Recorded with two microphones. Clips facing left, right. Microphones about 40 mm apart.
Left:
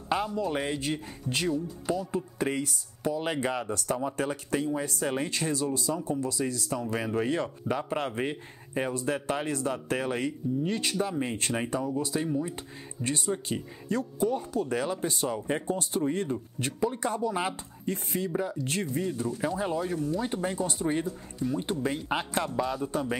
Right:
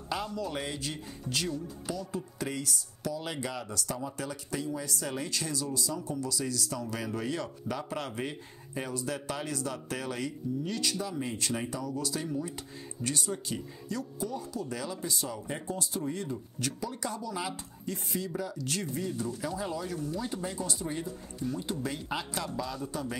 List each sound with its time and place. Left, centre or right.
0.1 s speech: left